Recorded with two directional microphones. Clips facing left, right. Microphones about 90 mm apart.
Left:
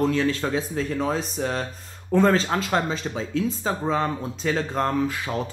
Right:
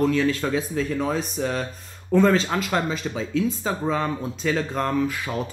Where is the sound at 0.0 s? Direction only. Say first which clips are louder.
Right 1 dB; 30° left (ahead or behind).